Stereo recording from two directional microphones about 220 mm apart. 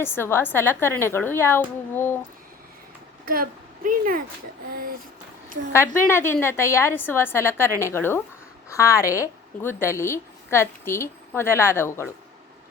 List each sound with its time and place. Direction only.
0.0 s a woman's voice: 10° left (ahead or behind)
3.2 s speech: 40° right (ahead or behind)
6.1 s a woman's voice: 10° left (ahead or behind)